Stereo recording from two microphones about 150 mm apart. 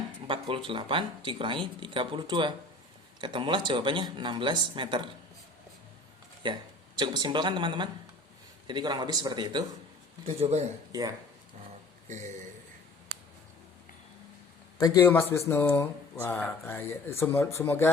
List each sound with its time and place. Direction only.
0.3 s speech: 35° right (ahead or behind)
6.4 s speech: 30° right (ahead or behind)
10.2 s speech: 45° right (ahead or behind)
10.9 s speech: 25° right (ahead or behind)
14.8 s a man's voice: 25° left (ahead or behind)